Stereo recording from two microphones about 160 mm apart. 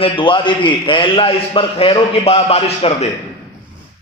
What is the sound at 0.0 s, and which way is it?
A man's voice, 30° left (ahead or behind).